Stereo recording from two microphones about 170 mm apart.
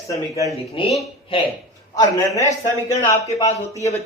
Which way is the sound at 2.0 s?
20° left (ahead or behind).